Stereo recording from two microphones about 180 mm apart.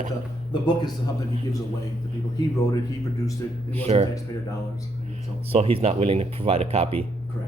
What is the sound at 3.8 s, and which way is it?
Speech, 35° right (ahead or behind).